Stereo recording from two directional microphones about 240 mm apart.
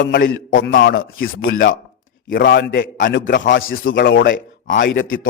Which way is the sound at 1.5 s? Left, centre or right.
Left.